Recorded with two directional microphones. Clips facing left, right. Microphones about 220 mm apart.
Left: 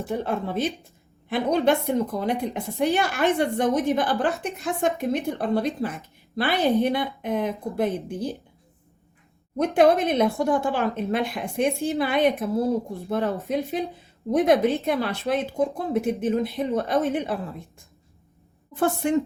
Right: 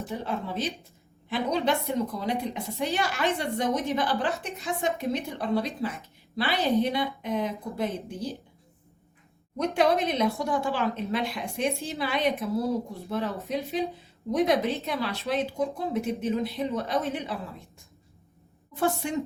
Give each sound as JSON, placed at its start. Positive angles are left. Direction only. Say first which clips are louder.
{"t": 0.0, "sound": "a woman's voice", "louder": "left 5 dB", "side_deg": 50}
{"t": 9.6, "sound": "a woman's voice", "louder": "left 5 dB", "side_deg": 50}
{"t": 18.8, "sound": "a woman's voice", "louder": "left 5 dB", "side_deg": 50}